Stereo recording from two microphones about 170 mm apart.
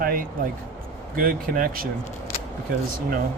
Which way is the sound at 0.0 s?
55° right (ahead or behind).